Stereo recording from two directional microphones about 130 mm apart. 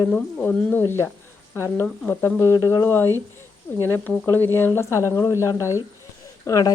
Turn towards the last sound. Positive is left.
turn(degrees=25)  # may be behind; listen again after turning